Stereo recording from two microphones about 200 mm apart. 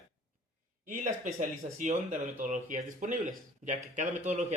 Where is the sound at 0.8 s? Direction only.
40° right (ahead or behind).